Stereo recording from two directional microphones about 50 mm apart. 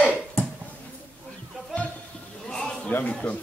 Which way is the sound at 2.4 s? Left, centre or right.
Centre.